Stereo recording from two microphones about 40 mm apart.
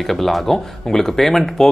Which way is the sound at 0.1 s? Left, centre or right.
Centre.